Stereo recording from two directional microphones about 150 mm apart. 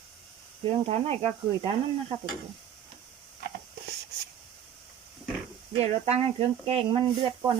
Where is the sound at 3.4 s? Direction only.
90° right.